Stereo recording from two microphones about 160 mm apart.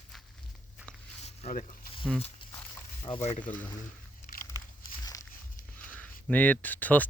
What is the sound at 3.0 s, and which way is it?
Speech, 35° left (ahead or behind).